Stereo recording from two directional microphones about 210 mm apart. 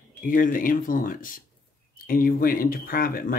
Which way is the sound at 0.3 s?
40° left (ahead or behind).